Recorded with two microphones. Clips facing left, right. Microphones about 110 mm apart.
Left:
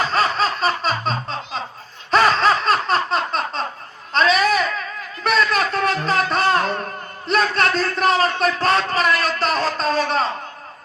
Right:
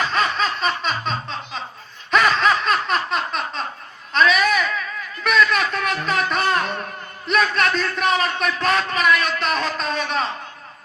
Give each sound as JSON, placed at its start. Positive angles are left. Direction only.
{"t": 0.0, "sound": "music", "side_deg": 35}
{"t": 2.0, "sound": "laughter", "side_deg": 35}
{"t": 4.1, "sound": "a sound", "side_deg": 35}